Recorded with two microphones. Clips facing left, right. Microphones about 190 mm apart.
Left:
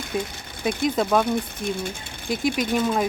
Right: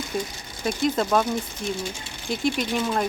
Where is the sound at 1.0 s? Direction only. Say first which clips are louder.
Left 2 dB; centre (ahead or behind).